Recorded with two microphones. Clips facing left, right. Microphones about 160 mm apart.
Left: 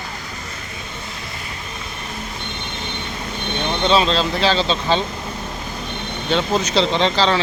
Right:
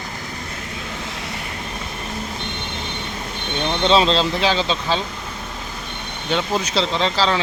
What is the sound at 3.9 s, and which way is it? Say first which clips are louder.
Speech: right 1 dB; 25° right (ahead or behind).